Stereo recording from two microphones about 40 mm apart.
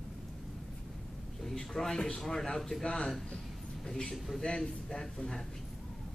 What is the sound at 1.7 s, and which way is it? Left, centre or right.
A man's voice, centre.